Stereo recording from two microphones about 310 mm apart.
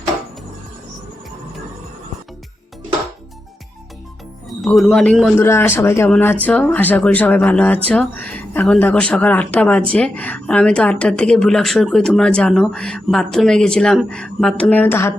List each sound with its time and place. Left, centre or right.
4.4 s a woman's voice: centre